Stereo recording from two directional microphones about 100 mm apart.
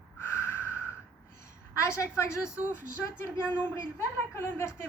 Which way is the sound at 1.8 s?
30° left (ahead or behind).